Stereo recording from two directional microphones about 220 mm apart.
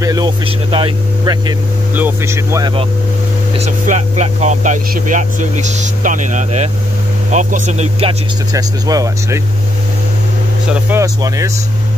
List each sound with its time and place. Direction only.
0.0 s speech: 20° right (ahead or behind)
2.0 s speech: 10° right (ahead or behind)
3.5 s speech: 30° right (ahead or behind)
8.5 s speech: 15° right (ahead or behind)
10.9 s speech: 15° right (ahead or behind)